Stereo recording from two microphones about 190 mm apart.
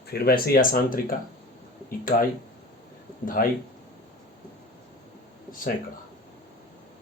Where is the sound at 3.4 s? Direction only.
50° left (ahead or behind).